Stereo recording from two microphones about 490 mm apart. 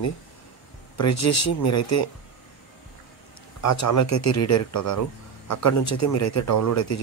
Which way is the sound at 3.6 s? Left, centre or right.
Left.